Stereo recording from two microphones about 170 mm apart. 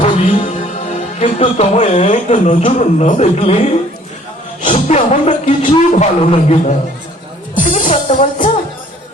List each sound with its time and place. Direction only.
0.0 s music: 30° left (ahead or behind)
1.2 s speech: 40° left (ahead or behind)
7.5 s music: 50° left (ahead or behind)